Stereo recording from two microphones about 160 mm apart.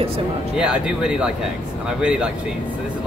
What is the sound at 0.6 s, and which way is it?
Speech, 5° right (ahead or behind).